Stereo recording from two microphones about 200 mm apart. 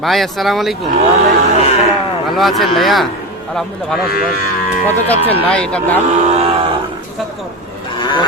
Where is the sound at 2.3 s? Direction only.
Centre (ahead or behind).